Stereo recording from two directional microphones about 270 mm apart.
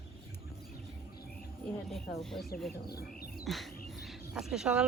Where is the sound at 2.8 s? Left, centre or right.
Left.